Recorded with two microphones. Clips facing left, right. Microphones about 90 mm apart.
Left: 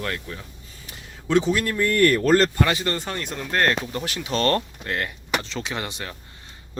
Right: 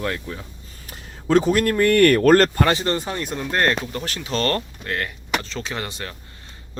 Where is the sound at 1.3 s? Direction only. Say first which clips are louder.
Right 4 dB; 45° right (ahead or behind).